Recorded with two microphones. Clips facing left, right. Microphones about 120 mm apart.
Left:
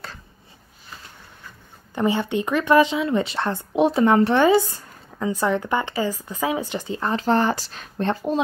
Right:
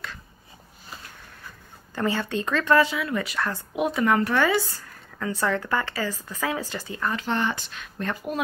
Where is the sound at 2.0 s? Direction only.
20° left (ahead or behind).